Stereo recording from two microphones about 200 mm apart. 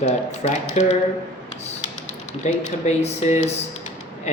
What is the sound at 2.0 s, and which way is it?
Speech, 35° left (ahead or behind).